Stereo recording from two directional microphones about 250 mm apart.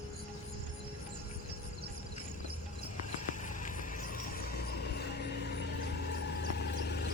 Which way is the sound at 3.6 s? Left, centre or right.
Left.